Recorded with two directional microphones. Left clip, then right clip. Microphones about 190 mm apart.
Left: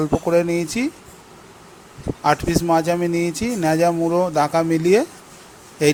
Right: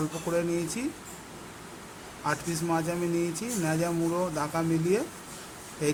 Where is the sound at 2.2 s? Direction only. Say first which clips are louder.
Left 12 dB; 45° left (ahead or behind).